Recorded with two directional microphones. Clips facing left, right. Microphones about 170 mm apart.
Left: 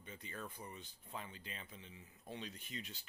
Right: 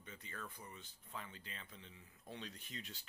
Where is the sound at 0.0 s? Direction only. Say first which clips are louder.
Left 3 dB; 20° left (ahead or behind).